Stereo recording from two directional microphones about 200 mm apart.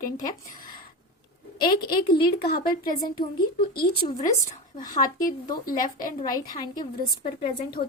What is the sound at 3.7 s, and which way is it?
Speech, 50° left (ahead or behind).